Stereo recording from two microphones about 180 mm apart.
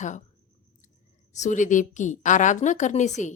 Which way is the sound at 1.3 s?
40° left (ahead or behind).